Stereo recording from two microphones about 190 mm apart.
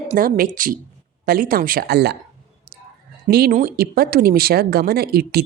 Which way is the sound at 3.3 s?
50° right (ahead or behind).